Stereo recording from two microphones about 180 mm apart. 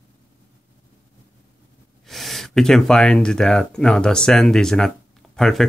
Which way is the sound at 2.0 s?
Centre (ahead or behind).